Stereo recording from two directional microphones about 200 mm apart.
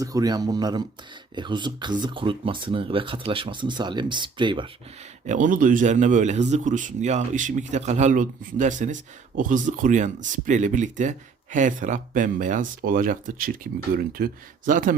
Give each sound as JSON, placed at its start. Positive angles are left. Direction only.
{"t": 0.0, "sound": "speech", "side_deg": -20}
{"t": 5.2, "sound": "a man's voice", "side_deg": -40}